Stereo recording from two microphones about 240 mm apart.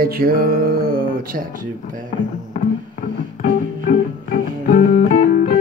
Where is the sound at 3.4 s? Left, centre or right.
Left.